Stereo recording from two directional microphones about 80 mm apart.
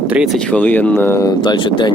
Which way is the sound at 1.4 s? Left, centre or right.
Left.